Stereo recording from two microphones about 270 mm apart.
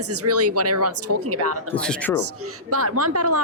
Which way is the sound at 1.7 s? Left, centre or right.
Centre.